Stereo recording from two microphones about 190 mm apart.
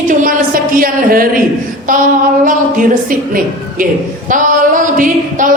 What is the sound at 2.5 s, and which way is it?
A woman's voice, 45° right (ahead or behind).